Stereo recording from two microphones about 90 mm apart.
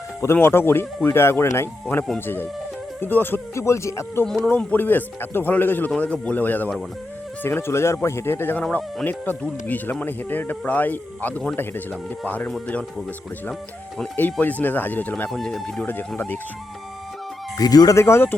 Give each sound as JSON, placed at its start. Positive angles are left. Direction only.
{"t": 0.3, "sound": "speech", "side_deg": 25}
{"t": 4.4, "sound": "speech", "side_deg": 20}
{"t": 14.2, "sound": "speech", "side_deg": 20}
{"t": 15.3, "sound": "speech", "side_deg": 5}
{"t": 15.9, "sound": "speech", "side_deg": 20}
{"t": 17.6, "sound": "speech", "side_deg": 45}
{"t": 17.9, "sound": "speech", "side_deg": 30}